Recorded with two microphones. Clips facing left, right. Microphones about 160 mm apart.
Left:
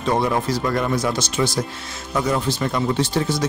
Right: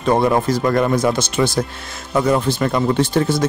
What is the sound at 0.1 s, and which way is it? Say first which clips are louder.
A man's voice: right 5 dB; 50° right (ahead or behind).